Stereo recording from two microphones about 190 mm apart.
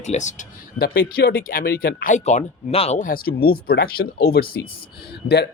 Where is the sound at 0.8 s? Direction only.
55° left (ahead or behind).